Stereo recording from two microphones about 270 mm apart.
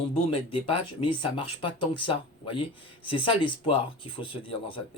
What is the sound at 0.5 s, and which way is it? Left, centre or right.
Speech, centre.